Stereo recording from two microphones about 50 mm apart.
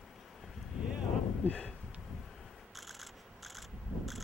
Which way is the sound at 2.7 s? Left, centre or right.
Centre.